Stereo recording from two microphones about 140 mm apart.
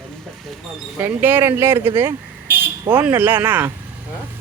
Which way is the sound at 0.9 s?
15° right (ahead or behind).